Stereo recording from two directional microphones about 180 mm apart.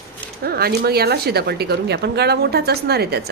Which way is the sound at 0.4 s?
60° right (ahead or behind).